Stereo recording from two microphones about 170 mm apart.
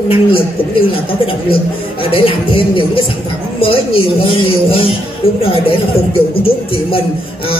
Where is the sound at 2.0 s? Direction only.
30° left (ahead or behind).